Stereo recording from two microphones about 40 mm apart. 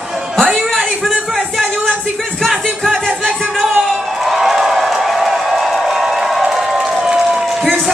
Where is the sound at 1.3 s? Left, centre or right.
Centre.